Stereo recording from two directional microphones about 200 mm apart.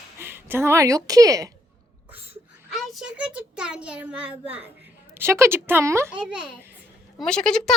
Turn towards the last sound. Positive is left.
turn(degrees=5)  # may be behind; listen again after turning